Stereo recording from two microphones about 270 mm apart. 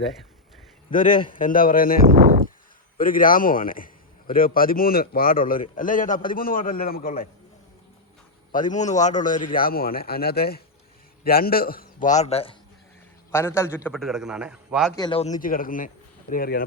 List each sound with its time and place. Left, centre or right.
0.9 s a man's voice: left
3.0 s a man's voice: left
8.5 s a man's voice: left
13.3 s a man's voice: centre
14.9 s a man's voice: centre